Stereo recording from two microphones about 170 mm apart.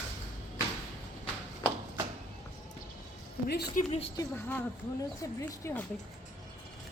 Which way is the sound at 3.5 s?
70° left (ahead or behind).